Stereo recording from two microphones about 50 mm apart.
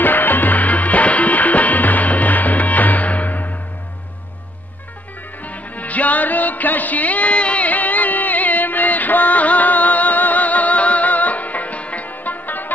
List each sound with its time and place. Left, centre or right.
0.0 s music: left
5.4 s music: left